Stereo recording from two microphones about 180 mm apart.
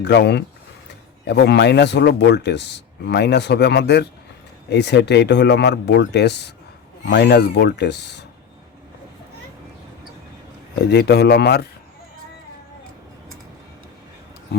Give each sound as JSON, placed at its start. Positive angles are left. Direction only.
{"t": 0.0, "sound": "speech", "side_deg": 70}
{"t": 10.8, "sound": "speech", "side_deg": 65}